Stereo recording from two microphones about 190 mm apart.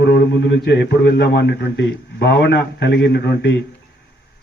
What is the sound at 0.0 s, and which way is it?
A man's voice, 60° left (ahead or behind).